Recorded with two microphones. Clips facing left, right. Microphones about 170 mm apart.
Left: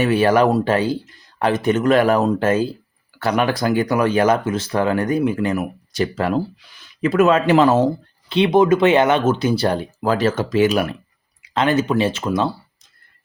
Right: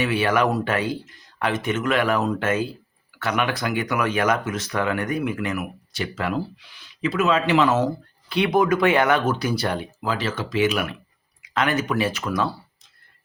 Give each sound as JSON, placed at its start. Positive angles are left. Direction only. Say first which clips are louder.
{"t": 0.0, "sound": "speech", "louder": "left 6 dB", "side_deg": 40}